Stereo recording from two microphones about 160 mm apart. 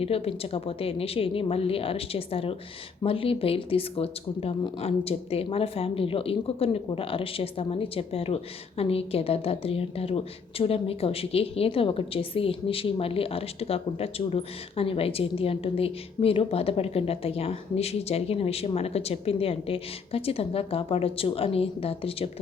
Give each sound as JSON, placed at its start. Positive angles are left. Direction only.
{"t": 0.0, "sound": "a woman's voice", "side_deg": 35}